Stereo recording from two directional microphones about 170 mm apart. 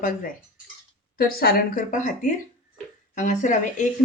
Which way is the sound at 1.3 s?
55° left (ahead or behind).